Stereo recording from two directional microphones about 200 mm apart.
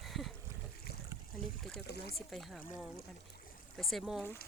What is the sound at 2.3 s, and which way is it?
Speech, centre (ahead or behind).